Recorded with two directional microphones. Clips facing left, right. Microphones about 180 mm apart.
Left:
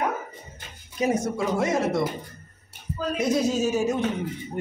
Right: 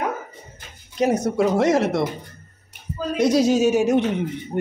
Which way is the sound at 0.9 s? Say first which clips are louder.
Right 5 dB; 70° right (ahead or behind).